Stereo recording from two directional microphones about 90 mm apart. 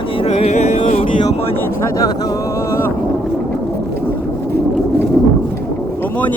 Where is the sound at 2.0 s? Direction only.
40° left (ahead or behind).